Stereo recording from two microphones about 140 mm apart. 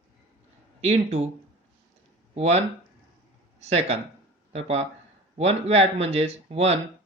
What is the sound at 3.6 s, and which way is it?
Speech, 50° right (ahead or behind).